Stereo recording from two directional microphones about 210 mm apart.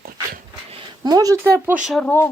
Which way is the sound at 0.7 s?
20° right (ahead or behind).